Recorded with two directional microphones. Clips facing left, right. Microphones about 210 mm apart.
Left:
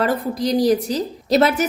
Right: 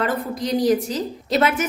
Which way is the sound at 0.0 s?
35° left (ahead or behind).